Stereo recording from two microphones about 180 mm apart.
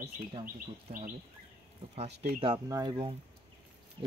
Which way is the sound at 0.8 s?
45° right (ahead or behind).